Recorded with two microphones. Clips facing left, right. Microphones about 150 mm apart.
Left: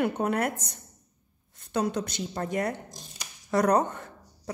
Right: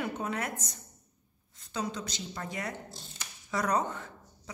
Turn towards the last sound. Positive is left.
turn(degrees=55)  # may be behind; listen again after turning